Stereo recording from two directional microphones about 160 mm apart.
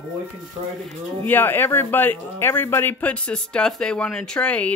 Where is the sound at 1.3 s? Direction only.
10° left (ahead or behind).